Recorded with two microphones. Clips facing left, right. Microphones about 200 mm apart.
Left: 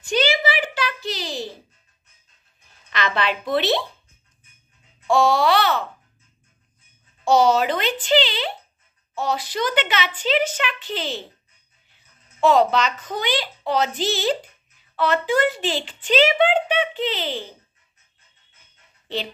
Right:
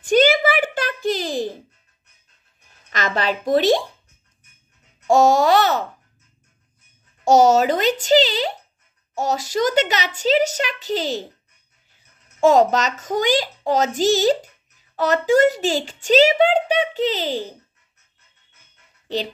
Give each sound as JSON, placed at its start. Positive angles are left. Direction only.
{"t": 0.0, "sound": "a sound", "side_deg": -50}
{"t": 2.9, "sound": "a child's voice", "side_deg": -45}
{"t": 5.0, "sound": "a child's voice", "side_deg": -45}
{"t": 7.2, "sound": "a child's voice", "side_deg": -45}
{"t": 12.4, "sound": "a child's voice", "side_deg": -45}